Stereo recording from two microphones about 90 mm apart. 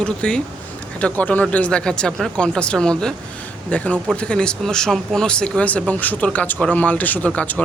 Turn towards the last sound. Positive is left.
turn(degrees=15)  # may be behind; listen again after turning